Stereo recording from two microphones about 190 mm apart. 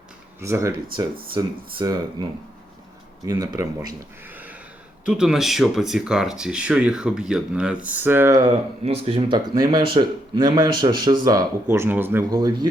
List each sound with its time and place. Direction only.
0.3 s speech: 15° right (ahead or behind)
0.9 s speech: 25° right (ahead or behind)
3.2 s speech: 20° right (ahead or behind)
5.0 s speech: 5° right (ahead or behind)
8.8 s speech: 30° right (ahead or behind)